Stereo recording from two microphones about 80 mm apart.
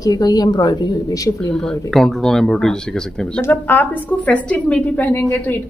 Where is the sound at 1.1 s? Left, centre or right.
Left.